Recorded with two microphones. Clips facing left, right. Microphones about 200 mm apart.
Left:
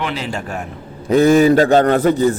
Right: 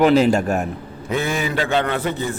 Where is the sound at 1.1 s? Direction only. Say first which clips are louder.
Left 12 dB; 40° left (ahead or behind).